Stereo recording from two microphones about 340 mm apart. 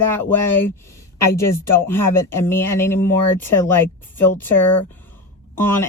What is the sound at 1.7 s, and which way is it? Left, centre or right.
Speech, centre.